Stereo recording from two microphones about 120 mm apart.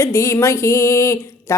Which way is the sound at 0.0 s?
25° left (ahead or behind).